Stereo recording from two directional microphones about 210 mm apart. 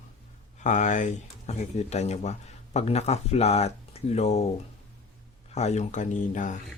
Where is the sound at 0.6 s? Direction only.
35° left (ahead or behind).